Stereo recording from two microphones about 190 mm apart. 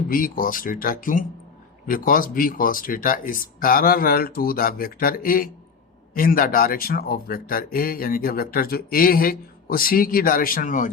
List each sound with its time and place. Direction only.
0.1 s speech: 50° left (ahead or behind)